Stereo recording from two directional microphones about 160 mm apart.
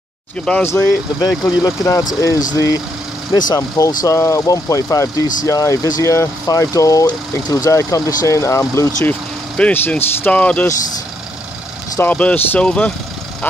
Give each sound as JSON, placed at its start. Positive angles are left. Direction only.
{"t": 0.5, "sound": "speech", "side_deg": 15}
{"t": 12.0, "sound": "speech", "side_deg": 10}